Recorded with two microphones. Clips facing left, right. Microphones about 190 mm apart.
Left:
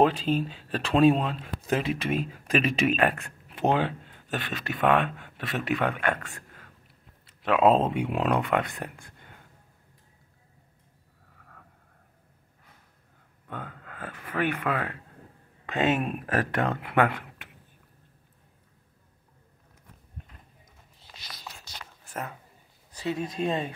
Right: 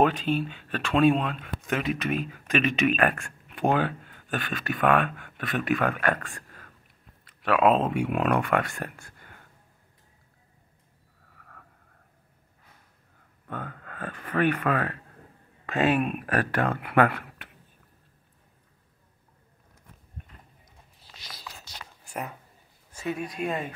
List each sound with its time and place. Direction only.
0.0 s speech: 30° left (ahead or behind)
13.5 s speech: 15° left (ahead or behind)
23.1 s speech: 25° left (ahead or behind)